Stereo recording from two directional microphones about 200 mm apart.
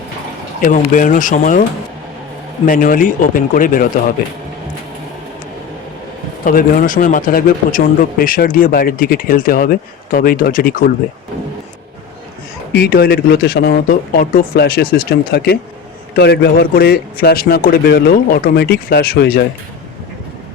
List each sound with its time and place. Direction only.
0.6 s speech: 40° left (ahead or behind)
2.6 s a man's voice: 45° left (ahead or behind)
6.4 s a man's voice: 45° left (ahead or behind)
12.7 s a man's voice: 50° left (ahead or behind)